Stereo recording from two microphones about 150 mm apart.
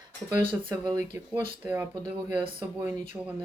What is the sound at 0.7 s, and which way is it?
Speech, 20° right (ahead or behind).